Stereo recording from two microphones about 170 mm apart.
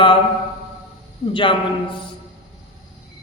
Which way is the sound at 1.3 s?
30° left (ahead or behind).